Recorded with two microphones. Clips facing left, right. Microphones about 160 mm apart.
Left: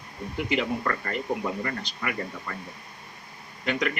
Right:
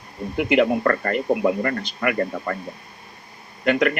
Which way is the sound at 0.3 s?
60° right (ahead or behind).